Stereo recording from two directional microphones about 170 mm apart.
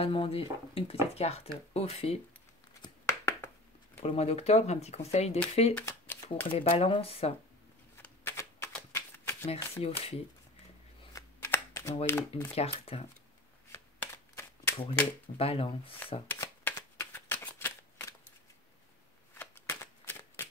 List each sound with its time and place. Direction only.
0.0 s speech: 35° left (ahead or behind)
3.1 s a sound: 15° left (ahead or behind)
4.0 s speech: 35° left (ahead or behind)
5.8 s shuffling cards: 10° left (ahead or behind)
6.5 s speech: 30° left (ahead or behind)
8.0 s typewriter: 15° left (ahead or behind)
9.8 s speech: 35° left (ahead or behind)
11.1 s a sound: 15° left (ahead or behind)
12.1 s speech: 15° left (ahead or behind)
12.5 s speech: 35° left (ahead or behind)
13.7 s shuffling cards: 15° left (ahead or behind)
15.3 s speech: 35° left (ahead or behind)
16.3 s shuffling cards: 15° left (ahead or behind)
19.3 s shuffling cards: 15° left (ahead or behind)